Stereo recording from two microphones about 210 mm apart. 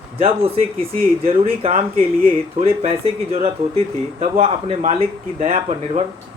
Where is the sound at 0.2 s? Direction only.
25° right (ahead or behind).